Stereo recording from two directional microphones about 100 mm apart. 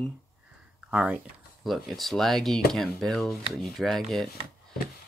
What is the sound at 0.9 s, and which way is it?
Speech, 15° right (ahead or behind).